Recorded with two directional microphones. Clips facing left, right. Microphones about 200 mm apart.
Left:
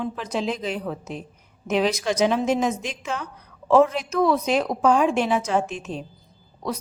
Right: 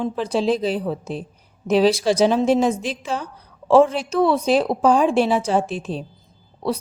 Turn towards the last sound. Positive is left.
turn(degrees=-30)  # may be behind; listen again after turning